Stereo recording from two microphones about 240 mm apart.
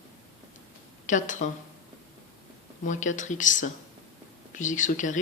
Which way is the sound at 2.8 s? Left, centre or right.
Left.